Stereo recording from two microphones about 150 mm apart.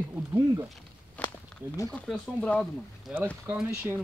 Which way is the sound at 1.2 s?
10° left (ahead or behind).